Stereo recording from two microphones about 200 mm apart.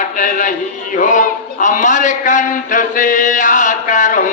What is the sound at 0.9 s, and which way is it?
A man's voice, 40° left (ahead or behind).